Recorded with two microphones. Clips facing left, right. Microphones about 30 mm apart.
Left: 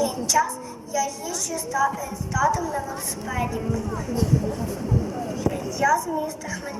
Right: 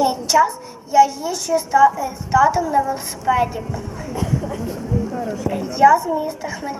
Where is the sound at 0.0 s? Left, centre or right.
Right.